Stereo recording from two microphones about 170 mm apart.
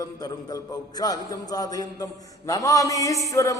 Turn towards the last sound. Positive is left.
turn(degrees=20)  # may be behind; listen again after turning